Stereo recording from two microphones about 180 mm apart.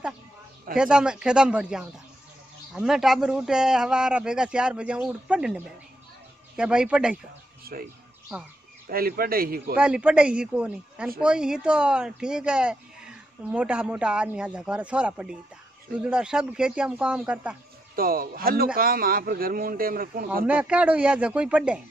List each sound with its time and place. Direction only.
0.7 s speech: 5° right (ahead or behind)
7.7 s speech: 55° right (ahead or behind)
8.8 s speech: 55° right (ahead or behind)
9.8 s speech: 5° right (ahead or behind)
17.9 s a man's voice: 55° right (ahead or behind)
20.4 s speech: 5° right (ahead or behind)